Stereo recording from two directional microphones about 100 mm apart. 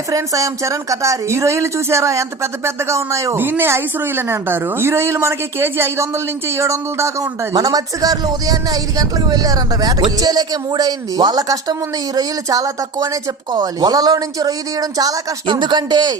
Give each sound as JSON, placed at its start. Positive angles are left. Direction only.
{"t": 0.1, "sound": "a woman's voice", "side_deg": -35}
{"t": 13.5, "sound": "a woman's voice", "side_deg": -45}
{"t": 15.4, "sound": "a man's voice", "side_deg": -50}